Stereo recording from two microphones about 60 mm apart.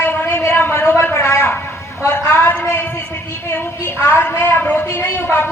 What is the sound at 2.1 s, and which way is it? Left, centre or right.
A woman's voice, left.